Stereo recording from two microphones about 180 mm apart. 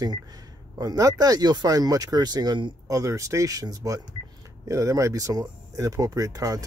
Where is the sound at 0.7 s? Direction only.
20° right (ahead or behind).